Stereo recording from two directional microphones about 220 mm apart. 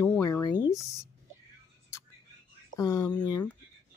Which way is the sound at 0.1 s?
10° left (ahead or behind).